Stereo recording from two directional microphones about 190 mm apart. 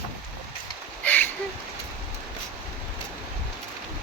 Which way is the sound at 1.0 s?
10° left (ahead or behind).